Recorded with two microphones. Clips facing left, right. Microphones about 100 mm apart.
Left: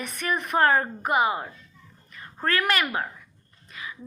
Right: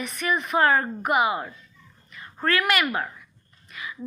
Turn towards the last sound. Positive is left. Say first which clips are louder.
# right 1 dB
turn(degrees=35)  # may be behind; listen again after turning